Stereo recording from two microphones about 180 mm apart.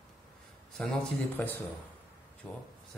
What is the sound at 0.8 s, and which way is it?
A man's voice, 10° left (ahead or behind).